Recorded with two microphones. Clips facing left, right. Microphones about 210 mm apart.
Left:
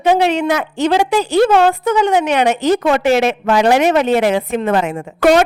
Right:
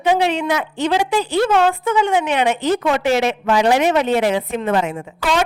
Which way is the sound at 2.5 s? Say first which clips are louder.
Left 4 dB; 85° left.